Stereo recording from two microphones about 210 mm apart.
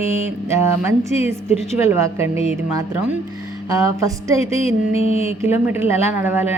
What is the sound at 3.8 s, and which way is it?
Speech, 15° right (ahead or behind).